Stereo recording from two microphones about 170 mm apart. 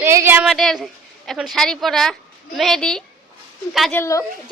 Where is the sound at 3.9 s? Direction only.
15° left (ahead or behind).